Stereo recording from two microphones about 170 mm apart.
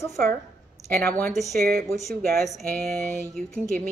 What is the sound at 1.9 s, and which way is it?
A woman's voice, centre (ahead or behind).